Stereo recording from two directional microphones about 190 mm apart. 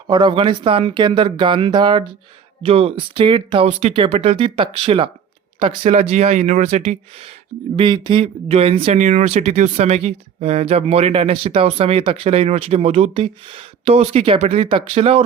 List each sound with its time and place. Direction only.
0.1 s speech: 25° right (ahead or behind)